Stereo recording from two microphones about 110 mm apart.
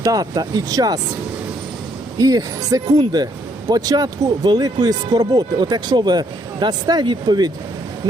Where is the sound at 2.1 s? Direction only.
35° right (ahead or behind).